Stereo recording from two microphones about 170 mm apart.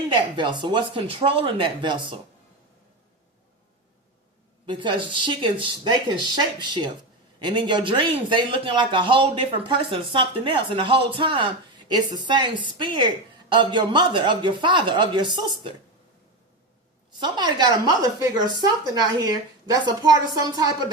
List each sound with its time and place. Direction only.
0.1 s a man's voice: 30° right (ahead or behind)
4.6 s a man's voice: 30° right (ahead or behind)
17.2 s a man's voice: 25° right (ahead or behind)